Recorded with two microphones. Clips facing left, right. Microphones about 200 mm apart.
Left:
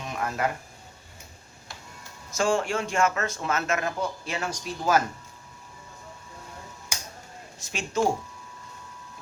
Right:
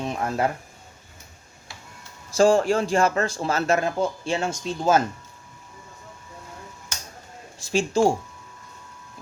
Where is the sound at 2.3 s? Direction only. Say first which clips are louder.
Right 7 dB; 35° right (ahead or behind).